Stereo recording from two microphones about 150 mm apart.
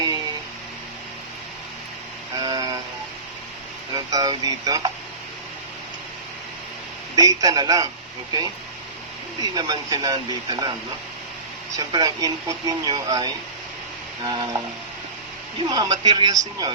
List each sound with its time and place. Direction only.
2.4 s vehicle: 25° right (ahead or behind)
3.9 s speech: 25° right (ahead or behind)
7.2 s speech: 25° right (ahead or behind)
9.4 s speech: 25° right (ahead or behind)
11.8 s speech: 25° right (ahead or behind)